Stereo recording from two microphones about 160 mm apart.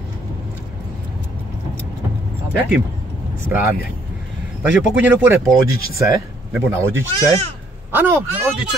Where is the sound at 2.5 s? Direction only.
10° right (ahead or behind).